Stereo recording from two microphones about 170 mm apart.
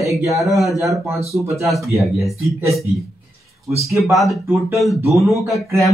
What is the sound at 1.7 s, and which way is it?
Speech, centre (ahead or behind).